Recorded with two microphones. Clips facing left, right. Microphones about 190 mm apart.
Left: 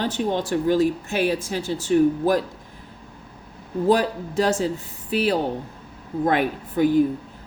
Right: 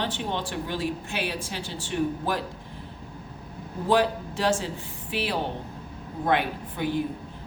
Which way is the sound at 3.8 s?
40° left (ahead or behind).